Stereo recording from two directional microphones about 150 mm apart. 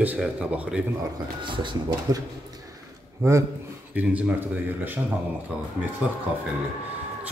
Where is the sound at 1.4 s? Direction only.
30° right (ahead or behind).